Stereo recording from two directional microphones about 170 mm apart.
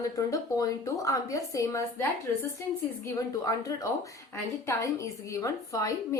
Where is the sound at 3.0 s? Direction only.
20° left (ahead or behind).